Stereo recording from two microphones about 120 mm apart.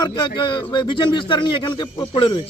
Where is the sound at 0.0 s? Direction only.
40° left (ahead or behind).